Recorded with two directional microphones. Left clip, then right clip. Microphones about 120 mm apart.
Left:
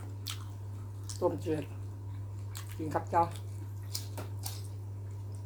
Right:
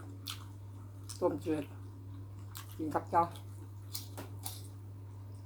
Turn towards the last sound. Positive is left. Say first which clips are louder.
# left 4 dB
turn(degrees=-15)  # may be behind; listen again after turning